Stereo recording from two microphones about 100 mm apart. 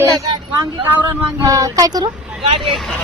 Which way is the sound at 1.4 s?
35° right (ahead or behind).